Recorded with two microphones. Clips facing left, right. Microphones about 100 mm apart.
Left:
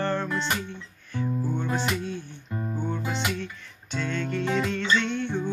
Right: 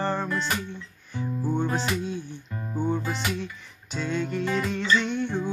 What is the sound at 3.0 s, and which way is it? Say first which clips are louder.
Music: left 1 dB; centre (ahead or behind).